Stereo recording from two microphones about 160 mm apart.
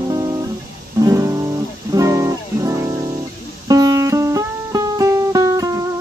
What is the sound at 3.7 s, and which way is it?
Music, 25° right (ahead or behind).